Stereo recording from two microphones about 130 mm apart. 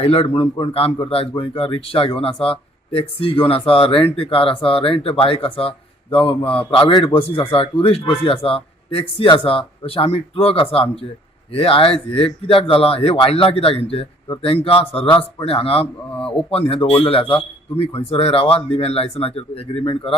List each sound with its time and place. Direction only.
0.0 s speech: 50° left (ahead or behind)
16.1 s speech: 5° left (ahead or behind)
16.5 s speech: 45° left (ahead or behind)